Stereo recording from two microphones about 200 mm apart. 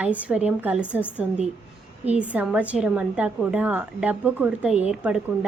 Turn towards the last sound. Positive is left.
turn(degrees=-5)  # may be behind; listen again after turning